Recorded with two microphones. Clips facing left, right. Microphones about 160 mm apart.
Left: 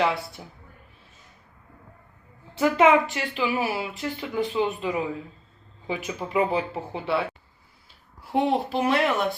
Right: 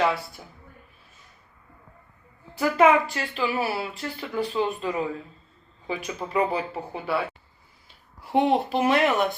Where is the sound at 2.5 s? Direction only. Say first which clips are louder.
Left 1 dB; 25° left (ahead or behind).